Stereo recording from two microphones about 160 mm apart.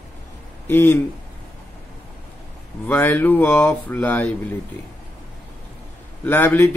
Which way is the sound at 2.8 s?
10° left (ahead or behind).